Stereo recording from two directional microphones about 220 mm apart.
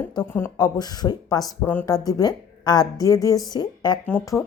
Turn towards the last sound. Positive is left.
turn(degrees=10)  # may be behind; listen again after turning